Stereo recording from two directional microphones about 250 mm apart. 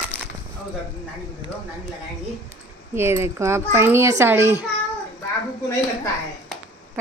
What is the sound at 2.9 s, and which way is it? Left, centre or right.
A child's voice, centre.